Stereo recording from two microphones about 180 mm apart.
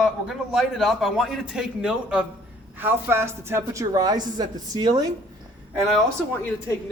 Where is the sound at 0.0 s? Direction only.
Centre (ahead or behind); by 4.9 s 25° right (ahead or behind).